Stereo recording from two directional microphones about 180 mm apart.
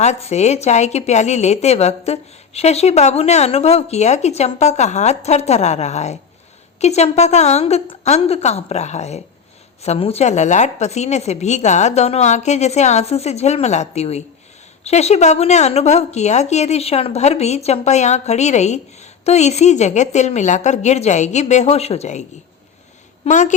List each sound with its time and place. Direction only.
0.0 s a woman's voice: 40° left (ahead or behind)
23.2 s a woman's voice: 45° left (ahead or behind)